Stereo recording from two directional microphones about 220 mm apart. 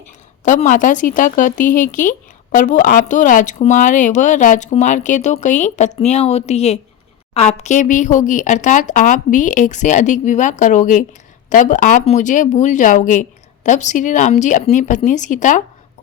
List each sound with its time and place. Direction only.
0.4 s speech: 35° left (ahead or behind)